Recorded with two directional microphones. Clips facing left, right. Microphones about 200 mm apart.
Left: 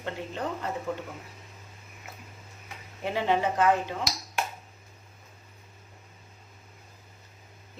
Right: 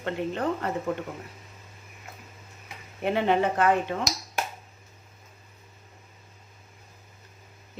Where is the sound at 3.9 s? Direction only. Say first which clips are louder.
Right 4 dB; 70° right (ahead or behind).